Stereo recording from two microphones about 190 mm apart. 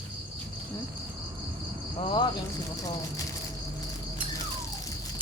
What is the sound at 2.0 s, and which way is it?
Speech, 25° left (ahead or behind).